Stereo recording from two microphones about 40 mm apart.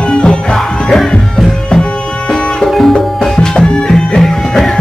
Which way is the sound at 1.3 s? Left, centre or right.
Centre.